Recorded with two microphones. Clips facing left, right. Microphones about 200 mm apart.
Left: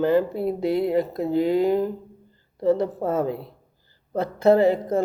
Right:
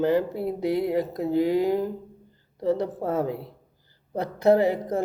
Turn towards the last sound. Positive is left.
turn(degrees=-15)  # may be behind; listen again after turning